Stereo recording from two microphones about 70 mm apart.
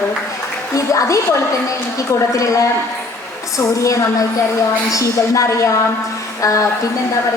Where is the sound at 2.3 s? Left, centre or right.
Left.